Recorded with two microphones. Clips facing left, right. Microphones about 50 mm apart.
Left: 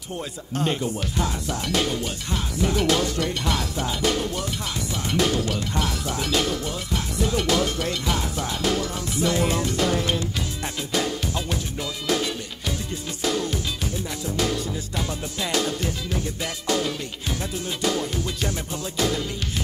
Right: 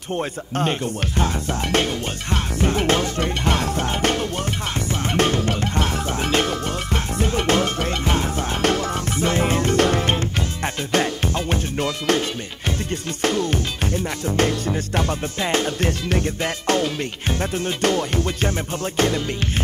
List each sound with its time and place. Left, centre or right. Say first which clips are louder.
0.1 s speech: right 6 dB; right
4.7 s music: right 3 dB; right
12.6 s speech: right 5 dB; right